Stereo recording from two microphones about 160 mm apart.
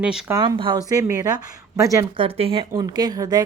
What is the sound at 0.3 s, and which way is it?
Speech, 20° right (ahead or behind).